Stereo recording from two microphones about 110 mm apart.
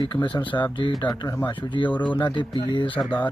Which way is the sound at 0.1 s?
45° left (ahead or behind).